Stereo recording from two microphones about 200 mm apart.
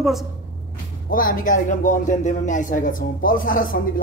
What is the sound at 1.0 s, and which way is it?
A man's voice, 45° left (ahead or behind).